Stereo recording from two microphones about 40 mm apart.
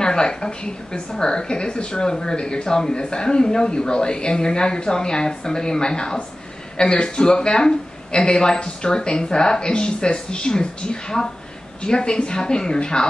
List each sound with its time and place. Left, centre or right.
0.0 s a woman's voice: centre